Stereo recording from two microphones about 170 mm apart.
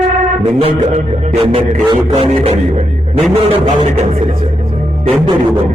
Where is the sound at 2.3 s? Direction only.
40° right (ahead or behind).